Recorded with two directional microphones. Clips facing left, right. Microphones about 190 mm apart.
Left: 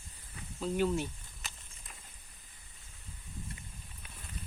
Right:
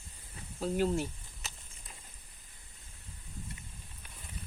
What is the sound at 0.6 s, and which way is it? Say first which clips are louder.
Speech: right 1 dB; 40° right (ahead or behind).